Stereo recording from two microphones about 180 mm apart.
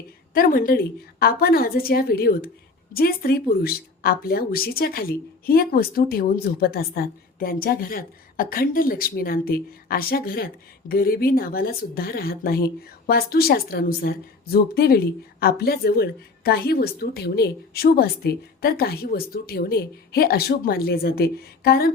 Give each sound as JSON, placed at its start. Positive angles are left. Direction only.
{"t": 0.3, "sound": "a woman's voice", "side_deg": 55}